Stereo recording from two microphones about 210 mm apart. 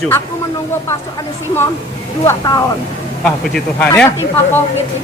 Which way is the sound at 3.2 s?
5° left (ahead or behind).